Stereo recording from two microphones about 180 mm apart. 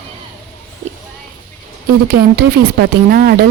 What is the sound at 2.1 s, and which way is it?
Speech, 55° right (ahead or behind).